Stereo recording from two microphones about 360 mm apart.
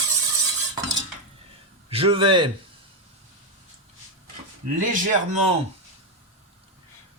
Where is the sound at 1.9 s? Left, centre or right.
Centre.